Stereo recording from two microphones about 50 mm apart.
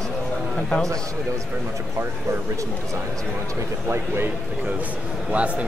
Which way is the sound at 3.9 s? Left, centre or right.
Right.